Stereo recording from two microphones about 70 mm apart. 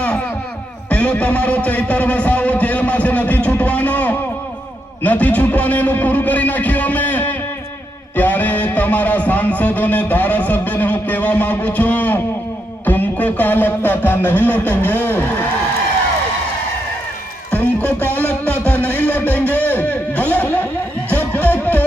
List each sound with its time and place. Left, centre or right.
0.9 s speech: centre
12.8 s music: left
15.0 s speech: left
17.5 s music: left
18.9 s a sound: left
21.3 s music: left